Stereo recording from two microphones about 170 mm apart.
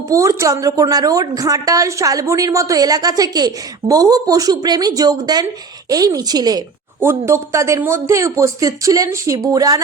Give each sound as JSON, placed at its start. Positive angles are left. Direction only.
{"t": 0.1, "sound": "a woman's voice", "side_deg": -15}